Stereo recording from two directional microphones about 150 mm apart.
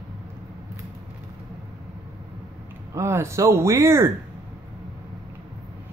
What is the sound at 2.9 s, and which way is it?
Speech, 20° right (ahead or behind).